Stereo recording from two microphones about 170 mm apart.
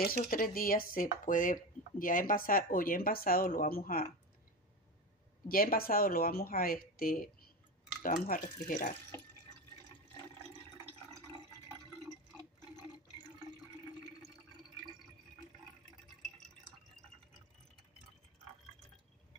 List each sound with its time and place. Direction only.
0.0 s speech: 60° left (ahead or behind)
5.5 s speech: 60° left (ahead or behind)